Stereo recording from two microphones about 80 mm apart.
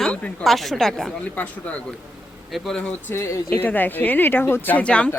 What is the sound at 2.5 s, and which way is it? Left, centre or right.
Speech, centre.